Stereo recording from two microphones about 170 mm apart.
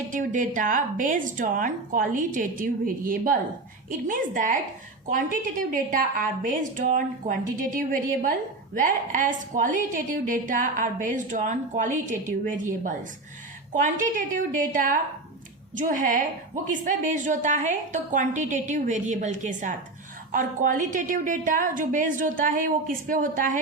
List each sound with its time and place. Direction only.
0.1 s a woman's voice: 50° right (ahead or behind)
8.7 s a woman's voice: 50° right (ahead or behind)